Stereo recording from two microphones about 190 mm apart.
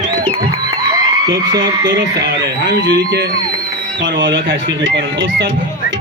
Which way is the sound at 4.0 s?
70° right (ahead or behind).